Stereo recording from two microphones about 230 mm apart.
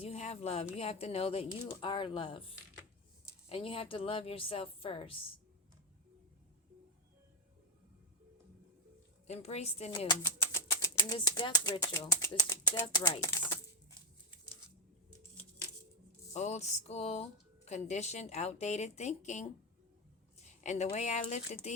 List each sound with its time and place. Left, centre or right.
0.0 s a woman's voice: left
9.2 s speech: left
16.3 s a woman's voice: left